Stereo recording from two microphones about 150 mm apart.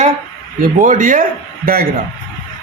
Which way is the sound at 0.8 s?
60° right (ahead or behind).